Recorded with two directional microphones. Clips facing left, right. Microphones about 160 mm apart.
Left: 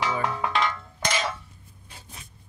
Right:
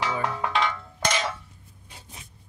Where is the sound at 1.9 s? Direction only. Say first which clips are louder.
Even; 20° right (ahead or behind).